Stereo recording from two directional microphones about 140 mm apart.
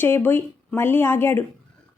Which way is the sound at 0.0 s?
15° left (ahead or behind).